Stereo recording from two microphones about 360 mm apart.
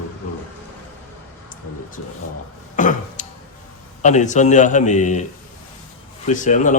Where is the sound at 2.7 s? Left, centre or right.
Left.